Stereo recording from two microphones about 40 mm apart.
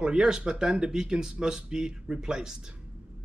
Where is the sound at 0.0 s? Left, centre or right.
Centre.